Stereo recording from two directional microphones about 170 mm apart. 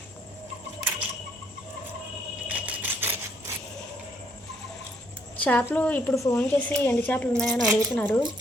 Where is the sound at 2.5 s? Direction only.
10° right (ahead or behind).